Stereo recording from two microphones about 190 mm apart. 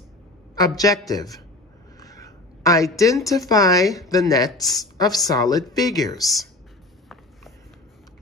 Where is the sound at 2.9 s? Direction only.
15° left (ahead or behind).